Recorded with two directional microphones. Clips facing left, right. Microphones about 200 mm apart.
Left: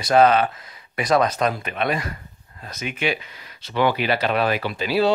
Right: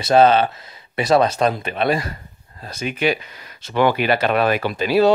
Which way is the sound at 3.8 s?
50° right (ahead or behind).